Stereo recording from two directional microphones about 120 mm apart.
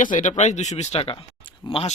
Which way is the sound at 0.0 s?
90° left.